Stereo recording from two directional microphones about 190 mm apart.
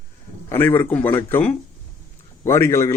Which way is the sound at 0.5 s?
10° left (ahead or behind).